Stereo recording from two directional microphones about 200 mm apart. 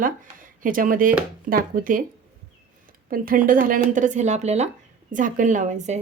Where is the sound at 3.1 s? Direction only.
45° right (ahead or behind).